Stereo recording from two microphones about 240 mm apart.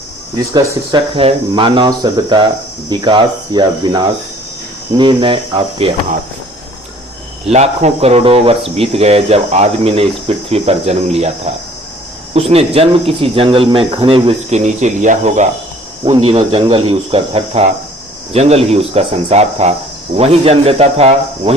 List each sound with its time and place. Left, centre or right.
0.5 s speech: centre
7.4 s speech: right